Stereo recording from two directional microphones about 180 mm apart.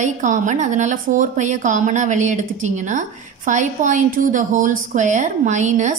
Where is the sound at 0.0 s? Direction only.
45° right (ahead or behind).